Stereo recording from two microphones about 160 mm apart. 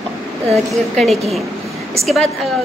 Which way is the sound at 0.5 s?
Centre (ahead or behind).